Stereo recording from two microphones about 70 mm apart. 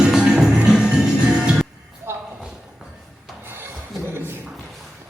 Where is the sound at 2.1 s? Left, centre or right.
Right.